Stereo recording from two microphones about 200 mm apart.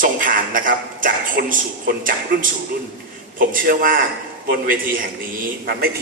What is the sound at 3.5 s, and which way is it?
Speech, 45° right (ahead or behind).